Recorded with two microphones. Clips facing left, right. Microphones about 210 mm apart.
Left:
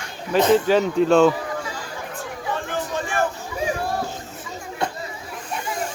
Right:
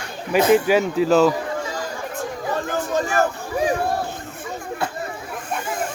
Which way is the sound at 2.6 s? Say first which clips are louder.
Right 4 dB; 40° right (ahead or behind).